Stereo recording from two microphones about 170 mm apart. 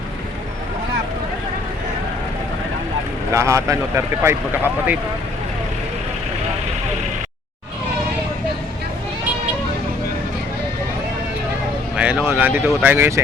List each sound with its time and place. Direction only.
3.3 s speech: 15° right (ahead or behind)
11.9 s speech: 5° right (ahead or behind)